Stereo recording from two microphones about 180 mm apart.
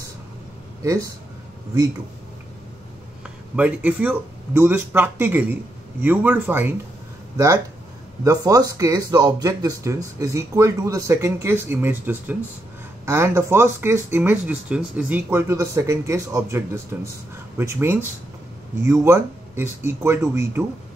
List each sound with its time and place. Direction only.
0.8 s speech: 20° right (ahead or behind)
3.5 s speech: 10° right (ahead or behind)
8.2 s speech: 20° right (ahead or behind)